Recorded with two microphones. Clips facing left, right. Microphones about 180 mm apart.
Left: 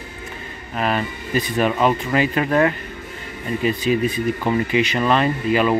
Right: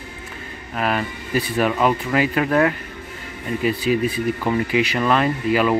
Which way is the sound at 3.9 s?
5° right (ahead or behind).